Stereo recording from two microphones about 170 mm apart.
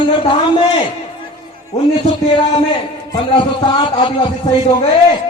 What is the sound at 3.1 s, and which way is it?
A man's voice, 30° left (ahead or behind).